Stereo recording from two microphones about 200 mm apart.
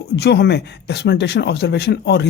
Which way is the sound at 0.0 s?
55° left (ahead or behind).